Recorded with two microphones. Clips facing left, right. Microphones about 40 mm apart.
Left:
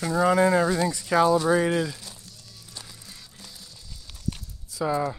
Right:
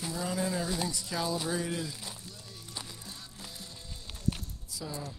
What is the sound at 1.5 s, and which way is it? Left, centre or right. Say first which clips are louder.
Speech: left 11 dB; left.